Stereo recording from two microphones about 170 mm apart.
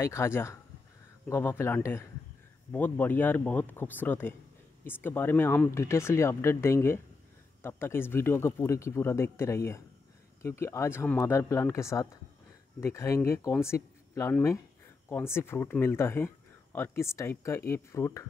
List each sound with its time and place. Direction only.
0.0 s speech: 15° left (ahead or behind)